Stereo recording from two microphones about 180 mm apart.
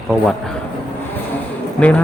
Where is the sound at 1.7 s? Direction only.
5° left (ahead or behind).